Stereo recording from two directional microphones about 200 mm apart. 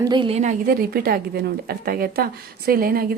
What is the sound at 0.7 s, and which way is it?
A woman's voice, 45° right (ahead or behind).